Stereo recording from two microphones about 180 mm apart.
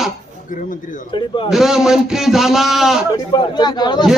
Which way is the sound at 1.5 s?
Centre (ahead or behind).